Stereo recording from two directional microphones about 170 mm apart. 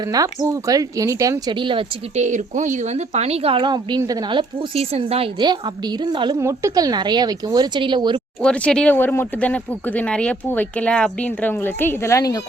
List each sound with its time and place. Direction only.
0.1 s speech: 20° right (ahead or behind)
2.1 s speech: 45° right (ahead or behind); by 8.2 s 30° right (ahead or behind)
8.4 s speech: 5° left (ahead or behind)